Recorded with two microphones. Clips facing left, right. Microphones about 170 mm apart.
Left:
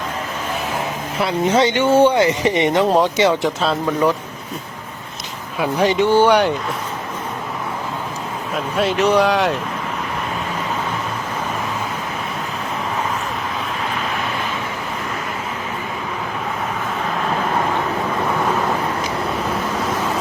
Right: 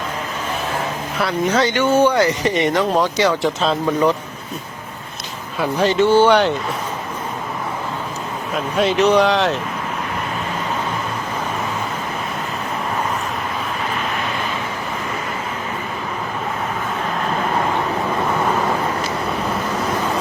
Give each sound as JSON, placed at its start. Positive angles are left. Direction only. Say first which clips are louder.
{"t": 1.2, "sound": "speech", "louder": "left 2 dB", "side_deg": 20}
{"t": 3.6, "sound": "speech", "louder": "right 1 dB", "side_deg": 5}
{"t": 5.5, "sound": "speech", "louder": "left 1 dB", "side_deg": 0}
{"t": 5.9, "sound": "speech", "louder": "right 2 dB", "side_deg": 15}
{"t": 8.5, "sound": "speech", "louder": "right 2 dB", "side_deg": 0}